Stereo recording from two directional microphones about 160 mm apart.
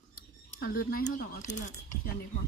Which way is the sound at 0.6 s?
70° left (ahead or behind).